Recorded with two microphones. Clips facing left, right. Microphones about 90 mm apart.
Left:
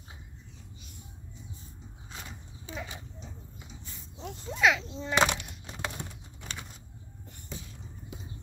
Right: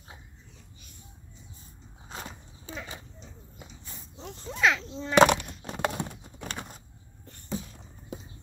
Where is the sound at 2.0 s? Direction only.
40° right (ahead or behind).